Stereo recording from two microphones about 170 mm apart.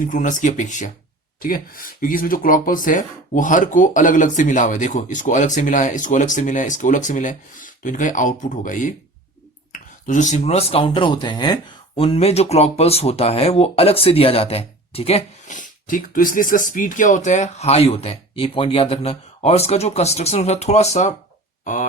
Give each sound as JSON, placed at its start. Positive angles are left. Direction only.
{"t": 0.0, "sound": "speech", "side_deg": 50}